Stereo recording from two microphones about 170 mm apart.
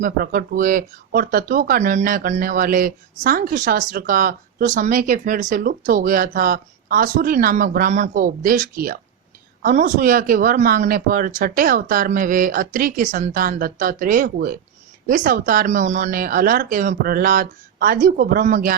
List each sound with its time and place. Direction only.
0.0 s speech: 60° right (ahead or behind)